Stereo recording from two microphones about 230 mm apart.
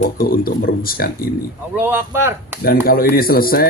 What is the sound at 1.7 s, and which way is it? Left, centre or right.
Speech, centre.